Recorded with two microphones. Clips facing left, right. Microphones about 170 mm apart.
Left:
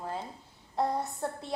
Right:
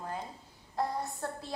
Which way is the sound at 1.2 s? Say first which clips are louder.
Left 3 dB; 20° left (ahead or behind).